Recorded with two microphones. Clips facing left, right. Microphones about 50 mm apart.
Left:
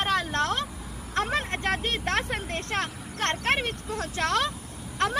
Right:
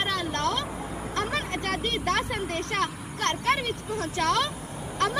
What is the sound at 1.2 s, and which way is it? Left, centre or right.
Speech, left.